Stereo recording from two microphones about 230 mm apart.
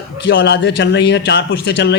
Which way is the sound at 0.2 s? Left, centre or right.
Left.